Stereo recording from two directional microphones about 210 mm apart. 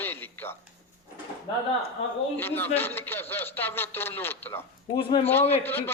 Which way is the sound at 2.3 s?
10° left (ahead or behind).